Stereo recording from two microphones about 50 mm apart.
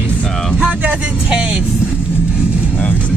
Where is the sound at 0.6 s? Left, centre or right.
Right.